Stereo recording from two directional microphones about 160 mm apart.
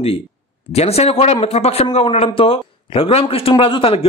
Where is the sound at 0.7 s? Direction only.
40° left (ahead or behind).